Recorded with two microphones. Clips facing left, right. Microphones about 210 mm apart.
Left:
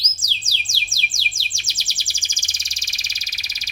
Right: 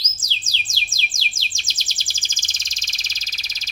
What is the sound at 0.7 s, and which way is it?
Chirp, 10° left (ahead or behind).